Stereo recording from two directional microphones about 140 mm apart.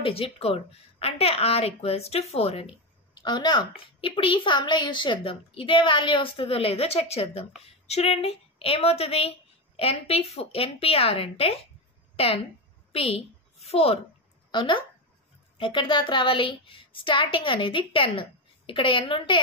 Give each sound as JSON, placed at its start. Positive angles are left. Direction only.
{"t": 0.0, "sound": "a woman's voice", "side_deg": 40}
{"t": 3.2, "sound": "a woman's voice", "side_deg": 30}
{"t": 14.5, "sound": "a woman's voice", "side_deg": 35}